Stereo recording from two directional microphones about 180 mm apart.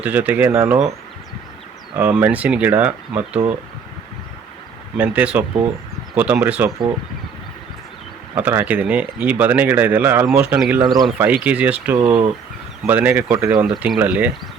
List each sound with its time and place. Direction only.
0.0 s speech: 10° right (ahead or behind)
2.0 s speech: 10° right (ahead or behind)
4.9 s speech: 10° right (ahead or behind)
8.4 s speech: 10° right (ahead or behind)
10.8 s speech: 25° right (ahead or behind)
11.2 s speech: 10° right (ahead or behind)